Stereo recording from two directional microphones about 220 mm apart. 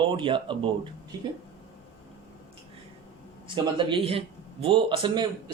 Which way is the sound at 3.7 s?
25° right (ahead or behind).